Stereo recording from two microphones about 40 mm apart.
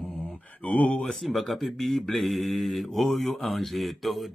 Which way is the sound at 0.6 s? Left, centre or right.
Left.